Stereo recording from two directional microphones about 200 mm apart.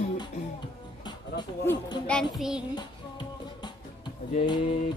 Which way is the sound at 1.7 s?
20° left (ahead or behind).